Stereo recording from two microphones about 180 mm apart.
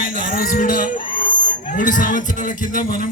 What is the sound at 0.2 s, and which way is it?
Music, 45° left (ahead or behind).